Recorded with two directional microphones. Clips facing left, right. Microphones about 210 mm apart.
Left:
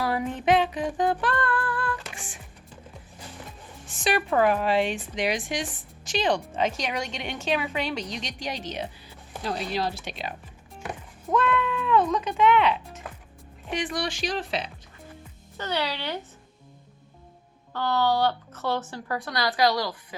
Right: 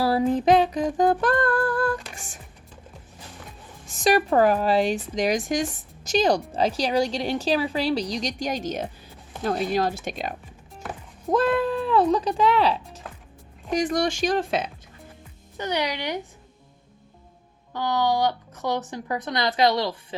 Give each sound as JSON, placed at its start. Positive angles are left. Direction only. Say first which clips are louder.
{"t": 0.0, "sound": "a woman's voice", "louder": "right 6 dB", "side_deg": -35}
{"t": 3.8, "sound": "a woman's voice", "louder": "right 5 dB", "side_deg": -40}
{"t": 11.3, "sound": "a woman's voice", "louder": "right 4 dB", "side_deg": -35}
{"t": 15.5, "sound": "speech", "louder": "right 3 dB", "side_deg": -15}
{"t": 17.7, "sound": "speech", "louder": "right 1 dB", "side_deg": -15}